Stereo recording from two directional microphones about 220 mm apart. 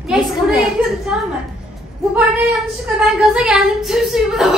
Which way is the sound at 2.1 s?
Centre (ahead or behind).